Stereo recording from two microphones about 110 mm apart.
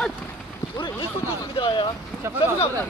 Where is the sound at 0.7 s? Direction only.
45° left (ahead or behind).